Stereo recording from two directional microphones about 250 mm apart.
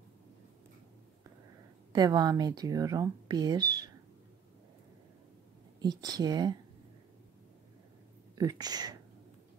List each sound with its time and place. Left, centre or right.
1.9 s speech: centre
5.8 s speech: centre
8.4 s speech: centre